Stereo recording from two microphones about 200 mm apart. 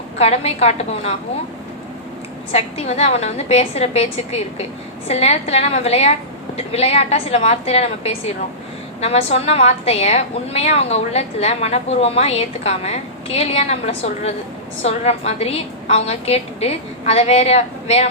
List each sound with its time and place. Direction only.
0.2 s a woman's voice: 30° left (ahead or behind)
2.5 s a woman's voice: 30° left (ahead or behind)